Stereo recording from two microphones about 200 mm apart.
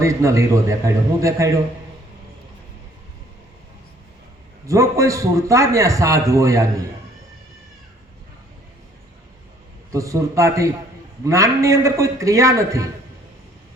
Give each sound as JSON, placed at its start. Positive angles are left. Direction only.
{"t": 0.0, "sound": "a man's voice", "side_deg": -15}
{"t": 4.6, "sound": "a man's voice", "side_deg": -15}
{"t": 9.9, "sound": "a man's voice", "side_deg": -15}